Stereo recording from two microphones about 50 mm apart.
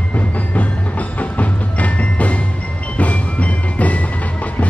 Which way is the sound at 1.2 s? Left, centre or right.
Left.